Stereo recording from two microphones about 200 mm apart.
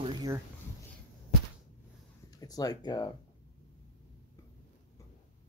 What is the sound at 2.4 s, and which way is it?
Speech, 20° left (ahead or behind).